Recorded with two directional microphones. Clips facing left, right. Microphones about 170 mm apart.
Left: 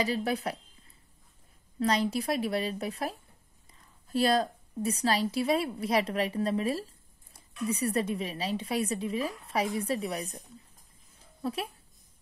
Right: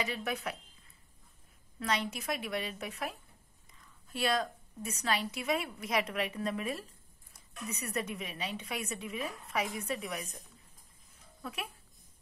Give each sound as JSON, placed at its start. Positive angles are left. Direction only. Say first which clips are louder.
{"t": 0.0, "sound": "a woman's voice", "louder": "left 6 dB", "side_deg": 35}
{"t": 1.8, "sound": "a woman's voice", "louder": "left 7 dB", "side_deg": 35}
{"t": 11.4, "sound": "a woman's voice", "louder": "left 8 dB", "side_deg": 30}